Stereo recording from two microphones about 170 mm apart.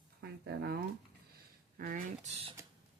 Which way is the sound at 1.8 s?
55° right (ahead or behind).